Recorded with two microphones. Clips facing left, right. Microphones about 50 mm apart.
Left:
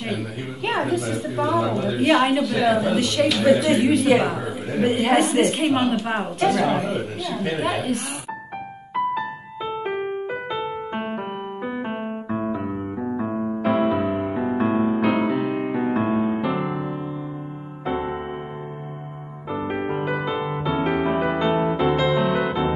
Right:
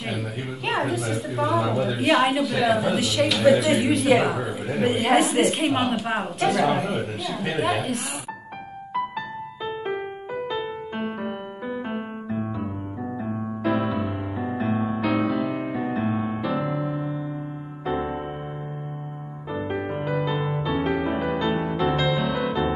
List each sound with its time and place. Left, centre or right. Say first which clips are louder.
0.7 s a woman's voice: left 2 dB; centre
10.5 s music: left 2 dB; left
12.4 s electric piano: left 4 dB; left
13.2 s music: left 2 dB; left
15.0 s music: left 2 dB; left
16.4 s music: left 1 dB; left
17.9 s music: left 1 dB; left
19.7 s music: left 2 dB; left
21.2 s music: left 4 dB; centre
21.8 s music: left 2 dB; left